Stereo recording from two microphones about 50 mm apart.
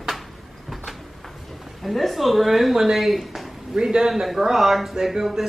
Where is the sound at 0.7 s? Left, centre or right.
Centre.